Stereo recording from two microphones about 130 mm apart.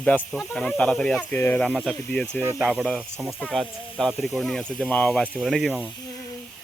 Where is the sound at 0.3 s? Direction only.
Centre (ahead or behind).